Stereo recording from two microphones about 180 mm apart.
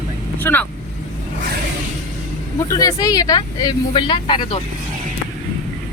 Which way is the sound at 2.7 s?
20° left (ahead or behind).